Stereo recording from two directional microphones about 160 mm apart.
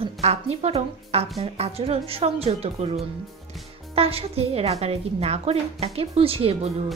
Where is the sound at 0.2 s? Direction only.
40° right (ahead or behind).